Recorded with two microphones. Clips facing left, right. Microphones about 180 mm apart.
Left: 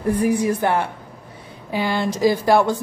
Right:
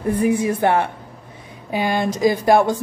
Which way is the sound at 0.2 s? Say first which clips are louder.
Right 3 dB; 25° right (ahead or behind).